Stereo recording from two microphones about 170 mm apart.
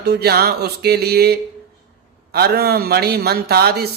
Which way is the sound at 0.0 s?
70° right (ahead or behind).